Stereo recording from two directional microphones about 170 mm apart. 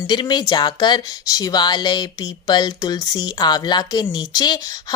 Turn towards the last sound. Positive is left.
turn(degrees=25)  # may be behind; listen again after turning